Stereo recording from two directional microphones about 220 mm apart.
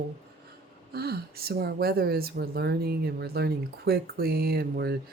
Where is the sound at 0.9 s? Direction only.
45° right (ahead or behind).